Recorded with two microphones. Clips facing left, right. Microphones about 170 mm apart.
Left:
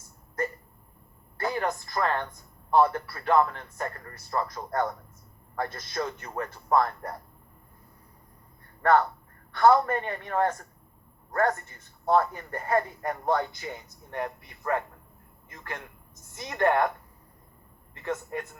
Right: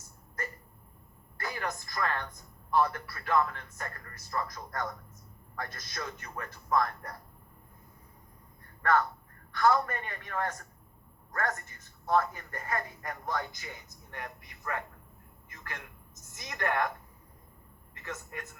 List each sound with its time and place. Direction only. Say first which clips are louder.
1.4 s speech: left 8 dB; 30° left (ahead or behind)
8.8 s a man's voice: left 5 dB; 30° left (ahead or behind)